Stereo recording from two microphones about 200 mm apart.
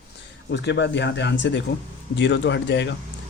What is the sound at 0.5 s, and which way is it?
Speech, 60° left (ahead or behind).